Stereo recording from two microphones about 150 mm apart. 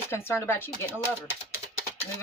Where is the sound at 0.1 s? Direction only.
15° left (ahead or behind).